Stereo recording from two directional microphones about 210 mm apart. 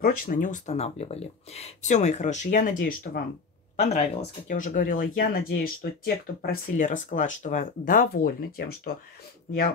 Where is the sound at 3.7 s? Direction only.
35° left (ahead or behind).